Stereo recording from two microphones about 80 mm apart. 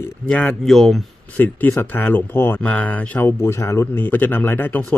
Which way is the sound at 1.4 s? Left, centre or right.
Left.